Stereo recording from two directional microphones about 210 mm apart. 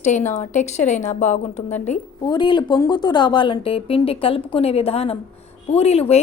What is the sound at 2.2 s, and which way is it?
Speech, 20° left (ahead or behind).